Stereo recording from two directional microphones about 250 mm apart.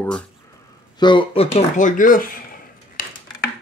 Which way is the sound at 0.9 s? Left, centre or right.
Centre.